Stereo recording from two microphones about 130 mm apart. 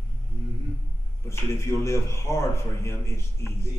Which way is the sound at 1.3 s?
25° left (ahead or behind).